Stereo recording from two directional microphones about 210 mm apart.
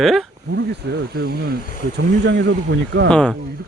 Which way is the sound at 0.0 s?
Centre (ahead or behind).